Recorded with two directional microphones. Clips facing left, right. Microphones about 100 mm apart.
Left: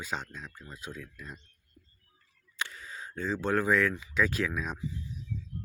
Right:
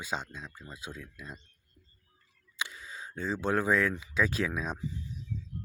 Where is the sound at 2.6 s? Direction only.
15° right (ahead or behind).